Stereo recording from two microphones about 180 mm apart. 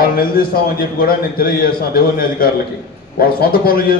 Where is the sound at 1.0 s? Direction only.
55° left (ahead or behind).